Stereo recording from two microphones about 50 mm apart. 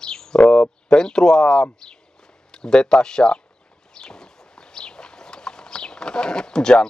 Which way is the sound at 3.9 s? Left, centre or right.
Centre.